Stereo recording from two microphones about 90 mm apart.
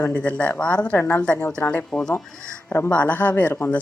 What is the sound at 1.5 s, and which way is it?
A woman's voice, 15° left (ahead or behind).